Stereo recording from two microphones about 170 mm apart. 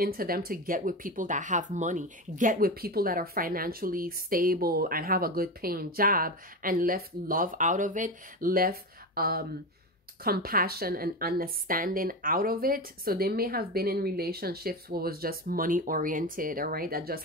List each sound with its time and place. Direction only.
0.0 s speech: 60° right (ahead or behind)